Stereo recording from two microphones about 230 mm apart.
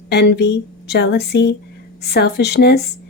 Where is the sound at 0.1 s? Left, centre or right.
Left.